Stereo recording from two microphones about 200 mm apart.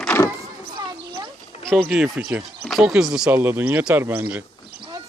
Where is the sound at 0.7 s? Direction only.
20° right (ahead or behind).